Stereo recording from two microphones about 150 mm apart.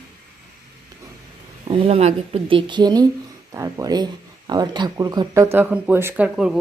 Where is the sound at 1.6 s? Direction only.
40° right (ahead or behind).